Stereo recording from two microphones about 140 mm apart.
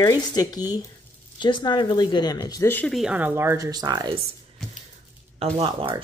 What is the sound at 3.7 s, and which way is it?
Speech, 30° right (ahead or behind).